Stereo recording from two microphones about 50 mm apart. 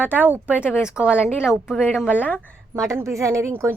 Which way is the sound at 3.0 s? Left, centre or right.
Right.